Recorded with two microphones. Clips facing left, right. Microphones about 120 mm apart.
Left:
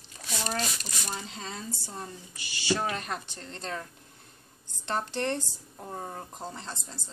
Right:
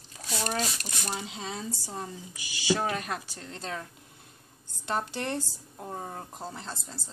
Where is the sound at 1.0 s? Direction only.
10° right (ahead or behind).